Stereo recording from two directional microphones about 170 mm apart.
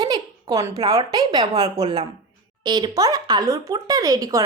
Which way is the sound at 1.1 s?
25° right (ahead or behind).